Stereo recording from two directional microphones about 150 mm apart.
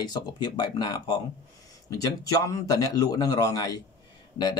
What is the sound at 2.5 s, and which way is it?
Speech, 25° left (ahead or behind).